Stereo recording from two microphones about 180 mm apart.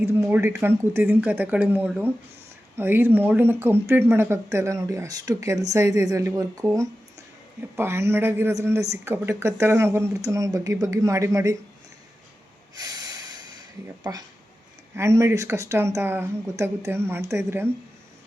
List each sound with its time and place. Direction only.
0.0 s a man's voice: 15° right (ahead or behind)
7.8 s a man's voice: 15° right (ahead or behind)
12.7 s snort: 20° right (ahead or behind)
13.8 s a man's voice: 15° right (ahead or behind)